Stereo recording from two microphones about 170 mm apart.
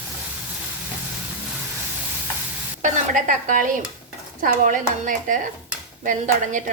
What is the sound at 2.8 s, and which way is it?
A woman's voice, 50° right (ahead or behind).